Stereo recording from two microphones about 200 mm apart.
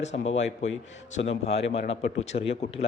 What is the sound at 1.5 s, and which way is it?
A man's voice, 30° left (ahead or behind).